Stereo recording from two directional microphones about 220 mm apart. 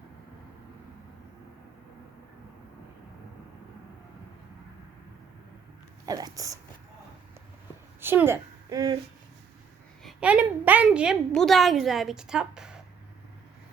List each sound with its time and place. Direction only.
6.1 s speech: 15° right (ahead or behind)
8.0 s a woman's voice: 10° right (ahead or behind)
10.0 s a woman's voice: 5° right (ahead or behind)